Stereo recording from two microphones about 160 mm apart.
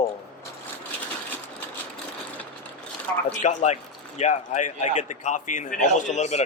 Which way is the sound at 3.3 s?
50° left (ahead or behind).